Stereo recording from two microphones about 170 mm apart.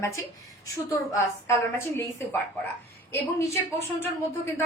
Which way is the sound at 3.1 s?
15° left (ahead or behind).